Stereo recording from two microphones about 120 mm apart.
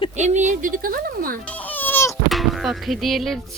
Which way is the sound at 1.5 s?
15° left (ahead or behind).